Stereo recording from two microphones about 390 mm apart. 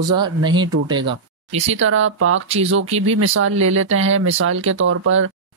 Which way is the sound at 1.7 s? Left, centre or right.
Right.